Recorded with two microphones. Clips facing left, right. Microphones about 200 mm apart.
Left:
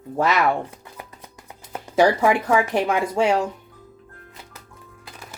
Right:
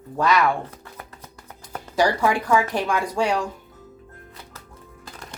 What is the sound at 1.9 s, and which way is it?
Speech, 20° left (ahead or behind).